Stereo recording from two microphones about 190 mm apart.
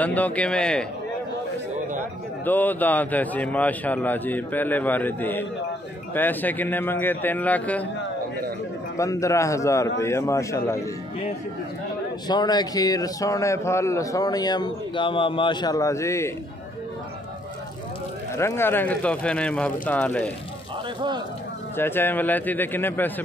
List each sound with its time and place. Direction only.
0.0 s a man's voice: 10° left (ahead or behind)
2.4 s a man's voice: 10° left (ahead or behind)
8.9 s a man's voice: 15° left (ahead or behind)
12.3 s a man's voice: 20° left (ahead or behind)
18.3 s a man's voice: 15° left (ahead or behind)
21.7 s a man's voice: 10° left (ahead or behind)